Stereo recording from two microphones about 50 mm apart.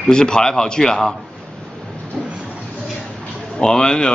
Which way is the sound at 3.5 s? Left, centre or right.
Centre.